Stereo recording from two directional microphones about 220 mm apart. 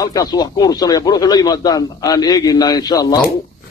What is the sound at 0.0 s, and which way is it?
Speech, 15° left (ahead or behind).